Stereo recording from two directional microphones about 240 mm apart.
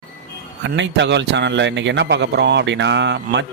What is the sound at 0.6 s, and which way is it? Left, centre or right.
A man's voice, right.